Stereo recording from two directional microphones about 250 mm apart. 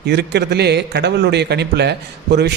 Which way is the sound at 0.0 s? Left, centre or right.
Right.